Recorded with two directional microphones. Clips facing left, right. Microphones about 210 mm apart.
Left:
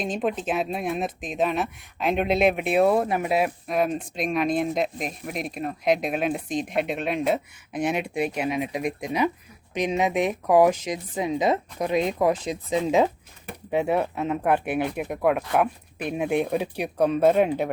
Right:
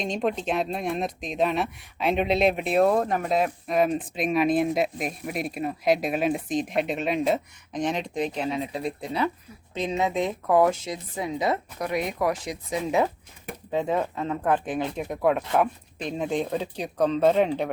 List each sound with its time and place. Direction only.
0.0 s speech: 5° left (ahead or behind)